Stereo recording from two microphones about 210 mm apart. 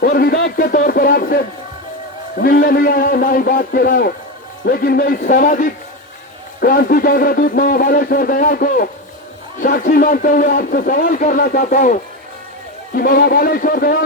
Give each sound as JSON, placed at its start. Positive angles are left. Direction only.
{"t": 0.0, "sound": "speech", "side_deg": 45}